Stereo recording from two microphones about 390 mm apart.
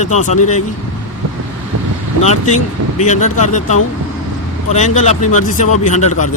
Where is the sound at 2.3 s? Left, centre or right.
Centre.